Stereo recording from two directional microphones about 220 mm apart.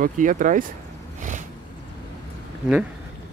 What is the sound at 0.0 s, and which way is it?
Speech, 35° right (ahead or behind).